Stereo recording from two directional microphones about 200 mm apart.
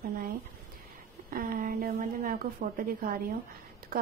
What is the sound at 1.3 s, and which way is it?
A woman's voice, 45° right (ahead or behind).